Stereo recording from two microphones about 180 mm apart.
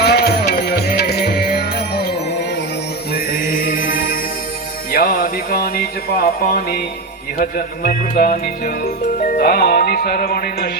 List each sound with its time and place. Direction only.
0.0 s music: 65° left (ahead or behind)
3.3 s mantra: 50° left (ahead or behind)
4.9 s music: 55° left (ahead or behind)
7.9 s music: 50° left (ahead or behind)